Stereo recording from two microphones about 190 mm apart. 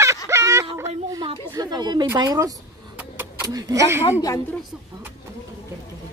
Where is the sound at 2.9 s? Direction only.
15° right (ahead or behind).